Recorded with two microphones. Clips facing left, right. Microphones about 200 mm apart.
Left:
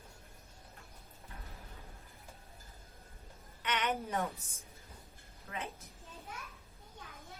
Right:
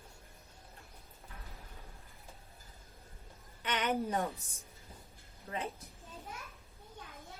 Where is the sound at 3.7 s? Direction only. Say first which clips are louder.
Right 2 dB; 35° right (ahead or behind).